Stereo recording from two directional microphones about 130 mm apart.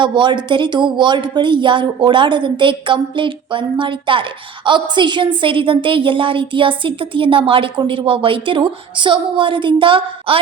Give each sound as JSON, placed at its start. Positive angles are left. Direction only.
{"t": 0.0, "sound": "a woman's voice", "side_deg": -35}